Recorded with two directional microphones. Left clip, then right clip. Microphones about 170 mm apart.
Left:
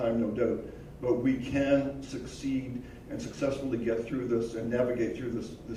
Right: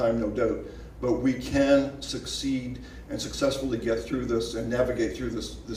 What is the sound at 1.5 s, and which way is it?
Speech, 30° right (ahead or behind).